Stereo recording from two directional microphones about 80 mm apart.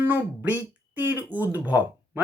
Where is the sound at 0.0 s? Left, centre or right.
Right.